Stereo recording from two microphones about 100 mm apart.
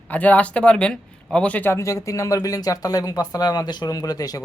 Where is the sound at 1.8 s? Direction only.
30° left (ahead or behind).